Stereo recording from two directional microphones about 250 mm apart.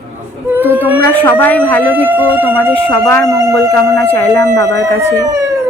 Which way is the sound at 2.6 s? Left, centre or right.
Centre.